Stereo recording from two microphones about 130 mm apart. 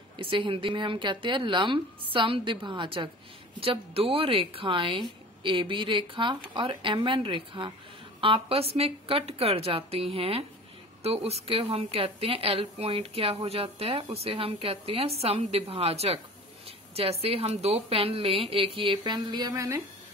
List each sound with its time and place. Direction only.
0.2 s a woman's voice: 40° right (ahead or behind)
19.1 s speech: 30° right (ahead or behind)